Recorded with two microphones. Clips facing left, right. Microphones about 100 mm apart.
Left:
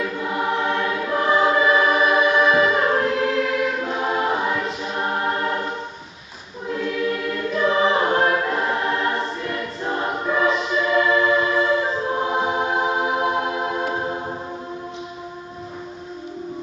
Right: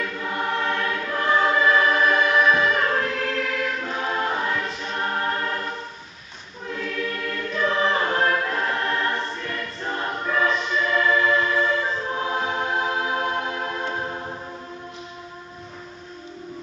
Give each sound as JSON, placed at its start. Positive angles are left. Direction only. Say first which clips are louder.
{"t": 0.0, "sound": "choir", "louder": "left 3 dB", "side_deg": 5}